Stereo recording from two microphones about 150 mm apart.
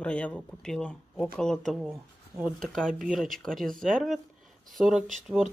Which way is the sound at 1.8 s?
15° right (ahead or behind).